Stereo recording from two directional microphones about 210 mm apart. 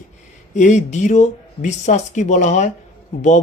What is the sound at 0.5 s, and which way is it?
Speech, 35° left (ahead or behind).